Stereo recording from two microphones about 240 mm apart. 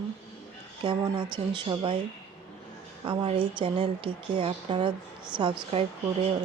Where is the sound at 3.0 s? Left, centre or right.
Centre.